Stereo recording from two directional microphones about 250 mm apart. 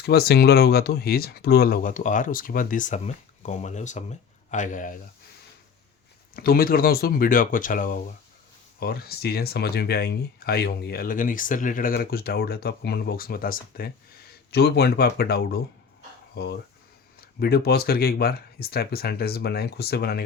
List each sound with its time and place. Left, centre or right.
0.0 s speech: left
6.3 s speech: left